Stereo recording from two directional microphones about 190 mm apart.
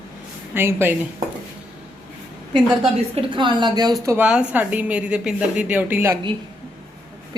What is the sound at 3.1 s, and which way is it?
A woman's voice, 25° right (ahead or behind).